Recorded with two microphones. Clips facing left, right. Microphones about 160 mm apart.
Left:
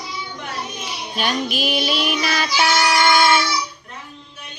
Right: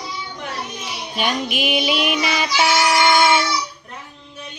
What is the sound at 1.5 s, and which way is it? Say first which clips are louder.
Child singing: right 1 dB; 15° right (ahead or behind).